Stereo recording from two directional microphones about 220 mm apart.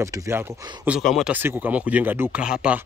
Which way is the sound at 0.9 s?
Centre (ahead or behind).